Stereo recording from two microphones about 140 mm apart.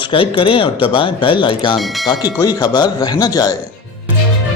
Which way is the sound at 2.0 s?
25° left (ahead or behind).